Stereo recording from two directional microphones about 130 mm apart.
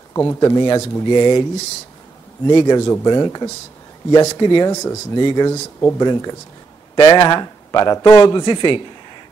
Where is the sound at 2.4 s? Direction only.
30° left (ahead or behind).